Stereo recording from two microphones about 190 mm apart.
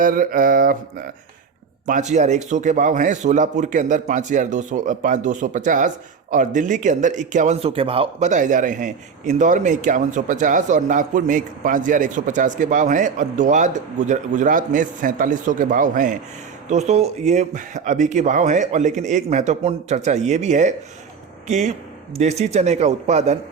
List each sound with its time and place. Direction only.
0.0 s mantra: 45° right (ahead or behind)
1.9 s speech: 40° right (ahead or behind)